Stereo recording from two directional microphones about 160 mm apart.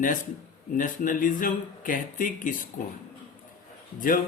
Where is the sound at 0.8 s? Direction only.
55° left (ahead or behind).